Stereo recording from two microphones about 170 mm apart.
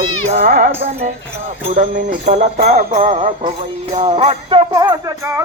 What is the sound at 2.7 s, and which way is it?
Jingle bell, 45° right (ahead or behind).